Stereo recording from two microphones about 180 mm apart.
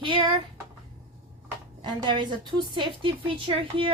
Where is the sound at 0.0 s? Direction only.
25° right (ahead or behind).